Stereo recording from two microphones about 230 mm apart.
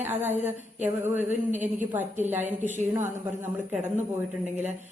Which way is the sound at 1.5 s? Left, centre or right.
Right.